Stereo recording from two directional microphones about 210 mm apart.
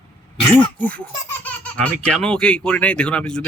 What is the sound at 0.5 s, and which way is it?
Speech, 5° left (ahead or behind).